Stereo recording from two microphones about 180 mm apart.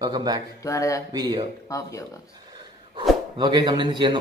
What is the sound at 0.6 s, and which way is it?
Speech, 15° left (ahead or behind).